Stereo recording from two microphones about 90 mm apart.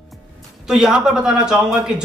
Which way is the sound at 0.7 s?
5° right (ahead or behind).